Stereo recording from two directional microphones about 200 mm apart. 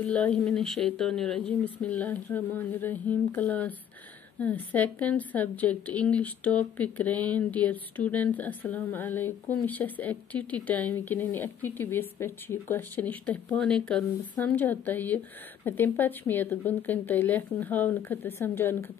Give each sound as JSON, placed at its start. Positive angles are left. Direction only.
{"t": 0.0, "sound": "a woman's voice", "side_deg": 5}